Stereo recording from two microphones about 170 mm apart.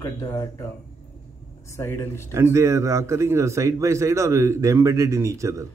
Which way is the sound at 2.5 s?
15° right (ahead or behind).